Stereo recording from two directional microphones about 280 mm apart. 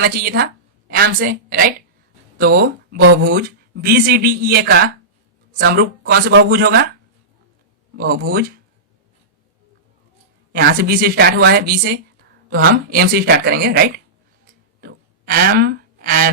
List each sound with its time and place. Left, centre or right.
0.0 s a woman's voice: right
7.9 s speech: right
10.5 s speech: right
14.8 s a sound: right